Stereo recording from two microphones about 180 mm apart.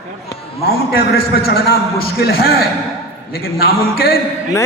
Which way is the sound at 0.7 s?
60° left (ahead or behind).